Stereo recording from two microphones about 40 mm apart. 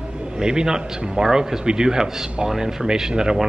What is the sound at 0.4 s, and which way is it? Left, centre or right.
A man's voice, centre.